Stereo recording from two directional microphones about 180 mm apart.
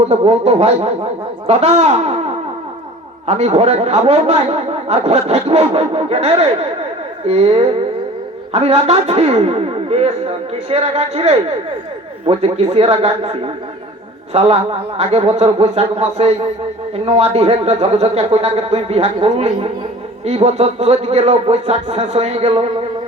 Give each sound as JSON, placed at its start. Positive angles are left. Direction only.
{"t": 0.0, "sound": "speech", "side_deg": -35}
{"t": 3.2, "sound": "speech", "side_deg": -35}
{"t": 14.3, "sound": "speech", "side_deg": -35}